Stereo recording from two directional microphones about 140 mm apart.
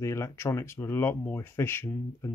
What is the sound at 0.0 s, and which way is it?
Speech, 20° left (ahead or behind).